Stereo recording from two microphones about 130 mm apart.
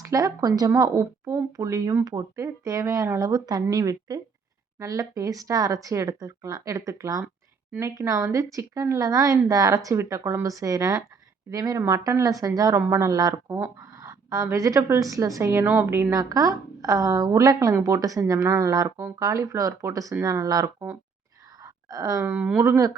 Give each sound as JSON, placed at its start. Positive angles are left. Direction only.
{"t": 0.0, "sound": "speech", "side_deg": -25}
{"t": 21.6, "sound": "a sound", "side_deg": -25}
{"t": 22.3, "sound": "speech", "side_deg": -15}